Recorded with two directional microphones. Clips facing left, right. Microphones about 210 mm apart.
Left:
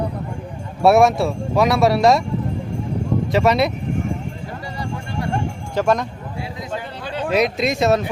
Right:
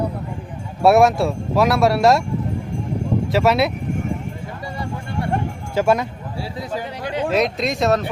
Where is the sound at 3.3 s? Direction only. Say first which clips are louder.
Even; 5° right (ahead or behind).